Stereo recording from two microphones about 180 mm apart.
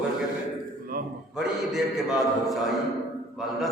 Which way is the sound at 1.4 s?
Centre (ahead or behind).